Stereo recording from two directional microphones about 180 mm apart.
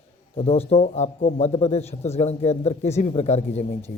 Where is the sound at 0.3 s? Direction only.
35° left (ahead or behind).